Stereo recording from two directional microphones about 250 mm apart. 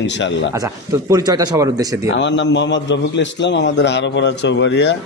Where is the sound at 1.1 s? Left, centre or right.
Centre.